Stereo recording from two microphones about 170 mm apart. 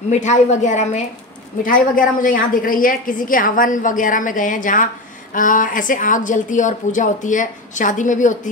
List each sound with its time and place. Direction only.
0.1 s a woman's voice: 45° left (ahead or behind)